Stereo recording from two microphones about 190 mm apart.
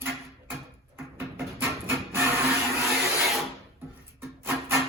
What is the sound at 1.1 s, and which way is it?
Printer, 10° right (ahead or behind).